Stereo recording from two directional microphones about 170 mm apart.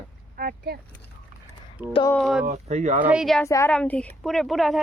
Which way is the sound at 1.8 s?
10° right (ahead or behind).